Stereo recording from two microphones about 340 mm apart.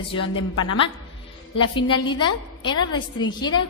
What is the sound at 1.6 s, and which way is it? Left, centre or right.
A woman's voice, centre.